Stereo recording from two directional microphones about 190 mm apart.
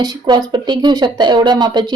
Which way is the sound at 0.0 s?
25° right (ahead or behind).